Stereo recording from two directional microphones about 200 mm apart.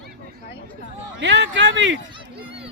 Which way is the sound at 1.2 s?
65° right (ahead or behind).